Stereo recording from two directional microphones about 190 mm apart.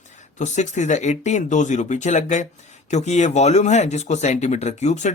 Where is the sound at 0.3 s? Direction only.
40° left (ahead or behind).